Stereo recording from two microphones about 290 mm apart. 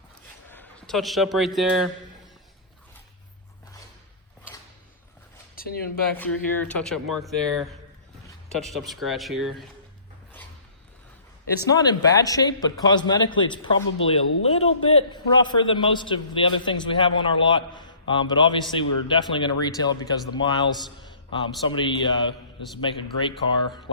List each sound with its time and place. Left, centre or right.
0.4 s a man's voice: centre
6.1 s speech: centre
11.7 s a man's voice: centre